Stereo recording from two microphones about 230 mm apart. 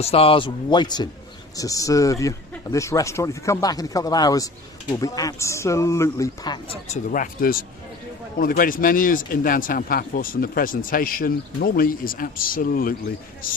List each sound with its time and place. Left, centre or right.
0.0 s a man's voice: left